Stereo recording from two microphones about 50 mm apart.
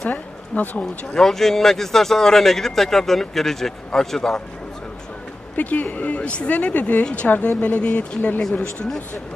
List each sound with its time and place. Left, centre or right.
0.1 s speech: left
1.1 s speech: centre
5.6 s speech: left